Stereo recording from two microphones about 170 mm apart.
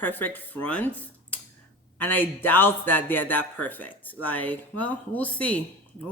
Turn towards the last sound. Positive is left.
turn(degrees=10)  # may be behind; listen again after turning